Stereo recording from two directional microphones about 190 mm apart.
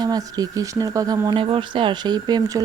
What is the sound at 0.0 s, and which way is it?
Speech, 20° right (ahead or behind).